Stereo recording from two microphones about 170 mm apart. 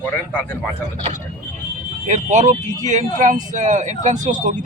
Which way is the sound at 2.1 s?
45° right (ahead or behind).